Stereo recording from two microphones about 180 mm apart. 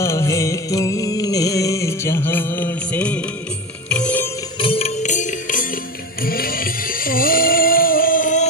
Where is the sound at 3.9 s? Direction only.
5° left (ahead or behind).